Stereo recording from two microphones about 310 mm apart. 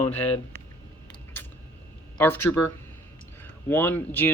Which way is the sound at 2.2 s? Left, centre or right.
Centre.